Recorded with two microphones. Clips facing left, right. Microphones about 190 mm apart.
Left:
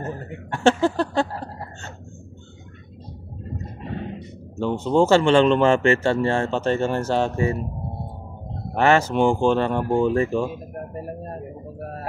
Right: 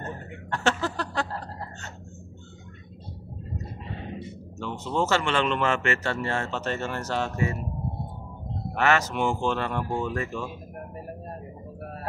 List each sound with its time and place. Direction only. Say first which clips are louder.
0.5 s a sound: left 8 dB; 25° left (ahead or behind)
4.6 s a man's voice: left 9 dB; 30° left (ahead or behind)
8.7 s a man's voice: left 6 dB; 30° left (ahead or behind)